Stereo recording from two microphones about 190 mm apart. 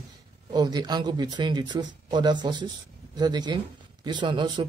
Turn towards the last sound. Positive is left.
turn(degrees=-25)  # may be behind; listen again after turning